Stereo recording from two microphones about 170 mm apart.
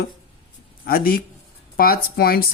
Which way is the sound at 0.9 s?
60° left (ahead or behind).